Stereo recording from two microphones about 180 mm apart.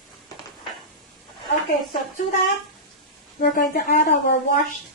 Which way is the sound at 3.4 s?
55° left (ahead or behind).